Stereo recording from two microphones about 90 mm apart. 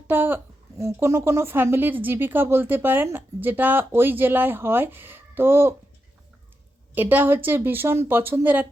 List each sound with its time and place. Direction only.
0.1 s speech: 20° right (ahead or behind)
0.8 s speech: 30° right (ahead or behind)
6.9 s speech: 20° right (ahead or behind)